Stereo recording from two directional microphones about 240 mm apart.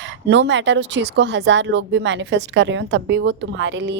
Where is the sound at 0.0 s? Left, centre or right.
Right.